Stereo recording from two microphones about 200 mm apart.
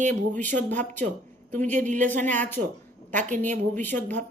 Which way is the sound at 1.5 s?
40° right (ahead or behind).